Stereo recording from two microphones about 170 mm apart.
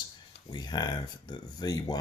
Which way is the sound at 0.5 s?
25° left (ahead or behind).